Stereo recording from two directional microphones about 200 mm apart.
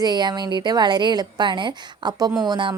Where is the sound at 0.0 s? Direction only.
20° right (ahead or behind).